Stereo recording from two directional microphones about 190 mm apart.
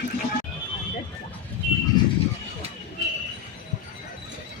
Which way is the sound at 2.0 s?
20° left (ahead or behind).